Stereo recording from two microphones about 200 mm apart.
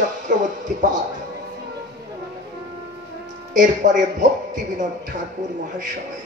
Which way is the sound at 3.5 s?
40° right (ahead or behind).